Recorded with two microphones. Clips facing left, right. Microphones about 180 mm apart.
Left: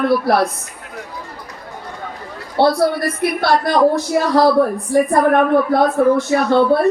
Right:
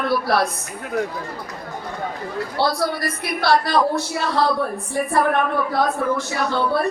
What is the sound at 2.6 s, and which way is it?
A man's voice, 55° left (ahead or behind).